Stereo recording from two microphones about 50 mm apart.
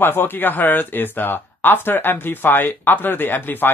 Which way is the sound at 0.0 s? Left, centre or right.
Left.